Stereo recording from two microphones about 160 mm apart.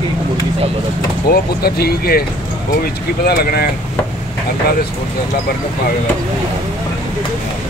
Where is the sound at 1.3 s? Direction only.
75° left (ahead or behind).